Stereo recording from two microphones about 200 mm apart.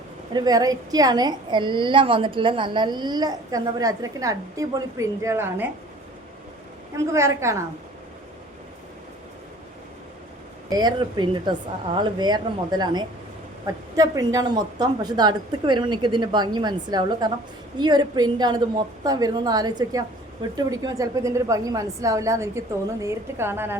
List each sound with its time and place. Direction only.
0.3 s a woman's voice: 20° right (ahead or behind)
6.9 s a woman's voice: 15° right (ahead or behind)
10.7 s a woman's voice: 20° right (ahead or behind)